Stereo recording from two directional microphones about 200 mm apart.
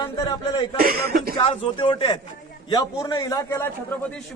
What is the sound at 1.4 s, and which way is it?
A man's voice, 25° left (ahead or behind).